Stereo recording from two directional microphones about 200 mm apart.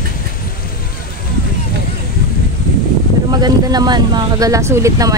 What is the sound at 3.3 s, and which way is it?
Speech, 20° right (ahead or behind).